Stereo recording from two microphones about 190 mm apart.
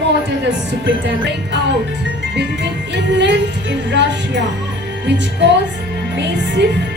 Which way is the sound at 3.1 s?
70° right (ahead or behind).